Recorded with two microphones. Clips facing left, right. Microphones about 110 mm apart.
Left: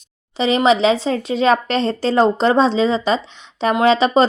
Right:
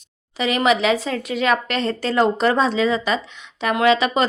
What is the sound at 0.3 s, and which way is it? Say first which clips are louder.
A woman's voice: left 4 dB; 25° left (ahead or behind).